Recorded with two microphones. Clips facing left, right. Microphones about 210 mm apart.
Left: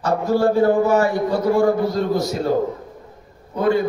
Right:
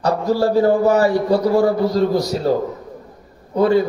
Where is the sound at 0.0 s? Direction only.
35° right (ahead or behind).